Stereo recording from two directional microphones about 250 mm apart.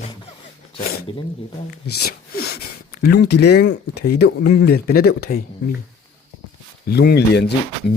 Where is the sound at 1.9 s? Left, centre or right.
Left.